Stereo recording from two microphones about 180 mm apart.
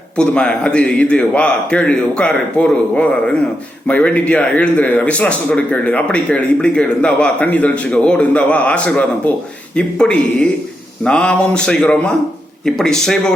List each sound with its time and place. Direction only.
0.2 s a man's voice: 5° left (ahead or behind)